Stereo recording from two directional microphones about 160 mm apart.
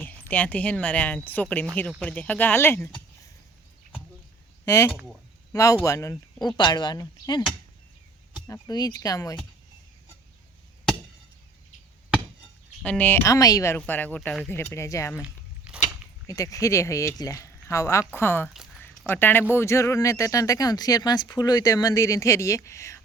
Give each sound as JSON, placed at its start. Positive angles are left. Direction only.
{"t": 0.0, "sound": "speech", "side_deg": 10}
{"t": 4.6, "sound": "speech", "side_deg": 20}
{"t": 8.4, "sound": "speech", "side_deg": 20}
{"t": 12.8, "sound": "speech", "side_deg": 10}
{"t": 15.2, "sound": "biting", "side_deg": -5}
{"t": 16.2, "sound": "speech", "side_deg": 20}
{"t": 18.4, "sound": "speech", "side_deg": 0}
{"t": 18.8, "sound": "a sound", "side_deg": 15}
{"t": 19.5, "sound": "speech", "side_deg": 15}